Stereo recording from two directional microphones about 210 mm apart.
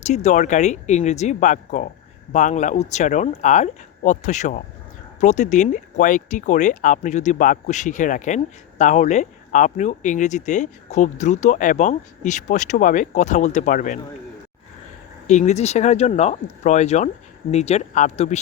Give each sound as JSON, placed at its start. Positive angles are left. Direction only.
{"t": 0.0, "sound": "speech", "side_deg": 35}
{"t": 15.3, "sound": "speech", "side_deg": 35}